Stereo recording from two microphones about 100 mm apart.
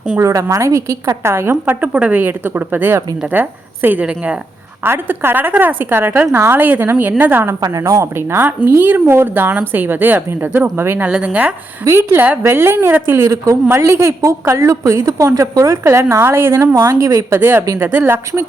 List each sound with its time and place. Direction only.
0.2 s a woman's voice: 30° right (ahead or behind)
7.6 s a woman's voice: 35° right (ahead or behind)
14.1 s a woman's voice: 40° right (ahead or behind); by 18.4 s 25° right (ahead or behind)